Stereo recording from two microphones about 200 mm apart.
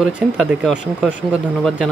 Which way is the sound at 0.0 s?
Centre (ahead or behind).